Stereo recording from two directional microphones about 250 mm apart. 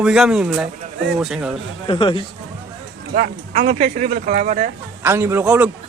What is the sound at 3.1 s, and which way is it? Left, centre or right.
Speech, right.